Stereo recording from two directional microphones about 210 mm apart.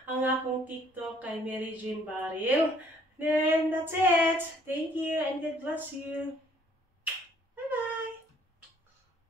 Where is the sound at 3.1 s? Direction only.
10° right (ahead or behind).